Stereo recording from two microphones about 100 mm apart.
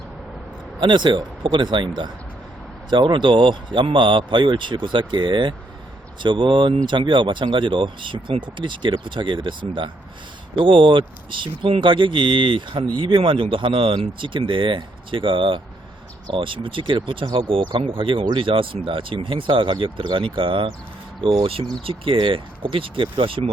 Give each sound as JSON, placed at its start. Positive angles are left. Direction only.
{"t": 0.8, "sound": "speech", "side_deg": -50}
{"t": 21.2, "sound": "speech", "side_deg": -70}